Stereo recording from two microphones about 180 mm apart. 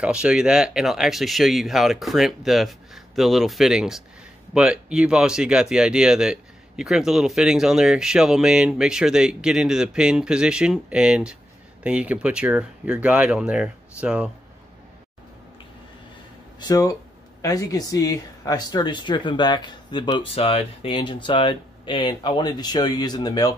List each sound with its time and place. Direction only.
0.0 s speech: 5° right (ahead or behind)
16.5 s speech: 20° left (ahead or behind)